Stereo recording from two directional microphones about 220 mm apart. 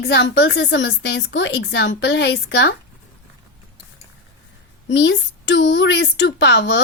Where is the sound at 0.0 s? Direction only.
50° left (ahead or behind).